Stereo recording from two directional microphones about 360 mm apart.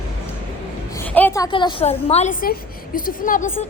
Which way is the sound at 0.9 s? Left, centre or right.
Centre.